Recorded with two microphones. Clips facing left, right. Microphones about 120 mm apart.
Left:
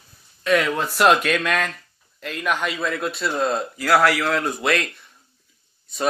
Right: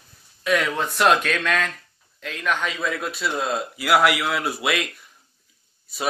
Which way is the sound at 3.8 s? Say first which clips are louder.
Left 1 dB; 15° right (ahead or behind).